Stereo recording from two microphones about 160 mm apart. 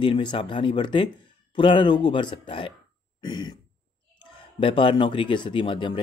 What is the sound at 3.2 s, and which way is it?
Throat clearing, 25° left (ahead or behind).